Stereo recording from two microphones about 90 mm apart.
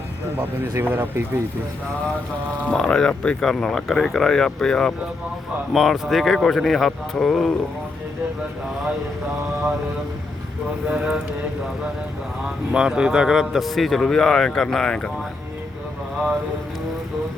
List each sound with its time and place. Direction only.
0.7 s speech: 25° right (ahead or behind)
2.6 s a man's voice: 10° left (ahead or behind)
10.8 s a sound: 10° right (ahead or behind)
12.7 s a man's voice: 10° right (ahead or behind); by 15.1 s 10° left (ahead or behind)